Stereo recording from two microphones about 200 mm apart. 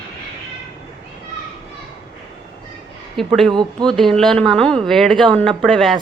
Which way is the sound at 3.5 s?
20° right (ahead or behind).